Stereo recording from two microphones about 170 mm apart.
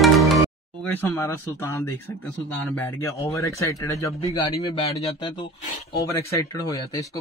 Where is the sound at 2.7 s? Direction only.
15° left (ahead or behind).